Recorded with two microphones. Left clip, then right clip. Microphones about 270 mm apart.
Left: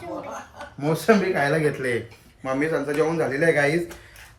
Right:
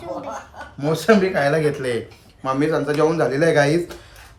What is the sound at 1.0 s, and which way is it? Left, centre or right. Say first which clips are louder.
Speech: right 3 dB; centre.